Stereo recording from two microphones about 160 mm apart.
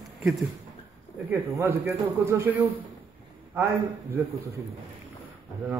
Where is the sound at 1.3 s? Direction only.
15° right (ahead or behind).